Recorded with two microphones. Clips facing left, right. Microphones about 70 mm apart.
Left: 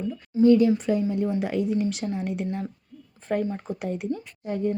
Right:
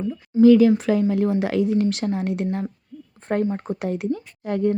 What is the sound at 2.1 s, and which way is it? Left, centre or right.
Speech, right.